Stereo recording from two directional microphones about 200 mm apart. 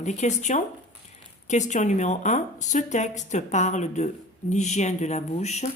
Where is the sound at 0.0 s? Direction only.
35° left (ahead or behind).